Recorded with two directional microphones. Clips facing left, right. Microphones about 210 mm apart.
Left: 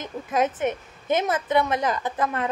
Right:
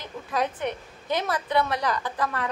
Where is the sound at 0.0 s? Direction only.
20° left (ahead or behind).